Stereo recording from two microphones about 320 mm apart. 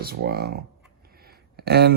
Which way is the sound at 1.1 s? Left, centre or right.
Right.